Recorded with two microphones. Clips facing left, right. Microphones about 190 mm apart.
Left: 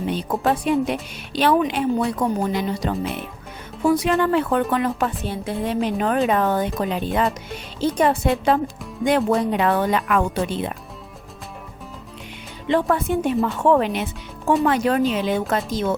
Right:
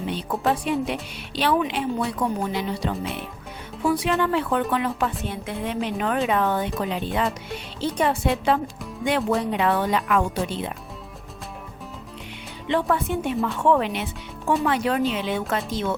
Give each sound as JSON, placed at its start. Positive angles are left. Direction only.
{"t": 0.1, "sound": "a woman's voice", "side_deg": 45}
{"t": 12.6, "sound": "a woman's voice", "side_deg": 40}